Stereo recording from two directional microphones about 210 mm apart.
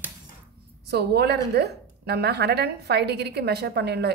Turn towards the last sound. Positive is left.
turn(degrees=-50)  # may be behind; listen again after turning